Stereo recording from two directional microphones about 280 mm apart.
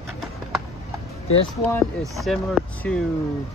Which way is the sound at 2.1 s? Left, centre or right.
Centre.